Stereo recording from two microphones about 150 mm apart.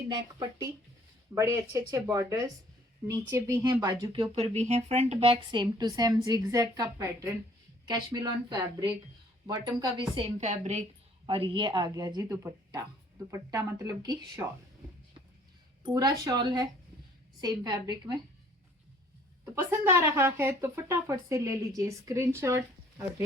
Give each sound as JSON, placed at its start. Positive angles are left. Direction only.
{"t": 0.1, "sound": "a woman's voice", "side_deg": -25}
{"t": 4.1, "sound": "a woman's voice", "side_deg": -40}
{"t": 10.4, "sound": "a woman's voice", "side_deg": -50}
{"t": 11.3, "sound": "a woman's voice", "side_deg": -35}
{"t": 15.8, "sound": "a woman's voice", "side_deg": -30}
{"t": 19.5, "sound": "a woman's voice", "side_deg": -15}